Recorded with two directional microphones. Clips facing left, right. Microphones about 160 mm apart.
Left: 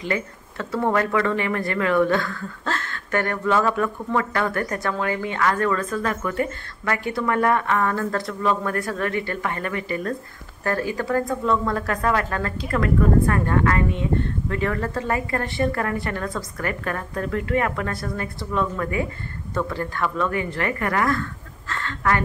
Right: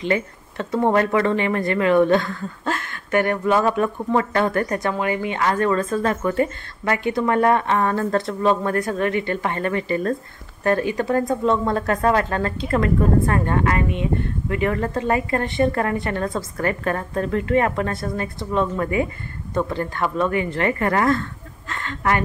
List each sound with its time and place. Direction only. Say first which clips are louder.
0.0 s speech: right 4 dB; 20° right (ahead or behind)